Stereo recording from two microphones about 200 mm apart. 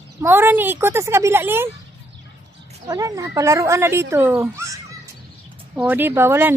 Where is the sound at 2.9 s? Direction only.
15° right (ahead or behind).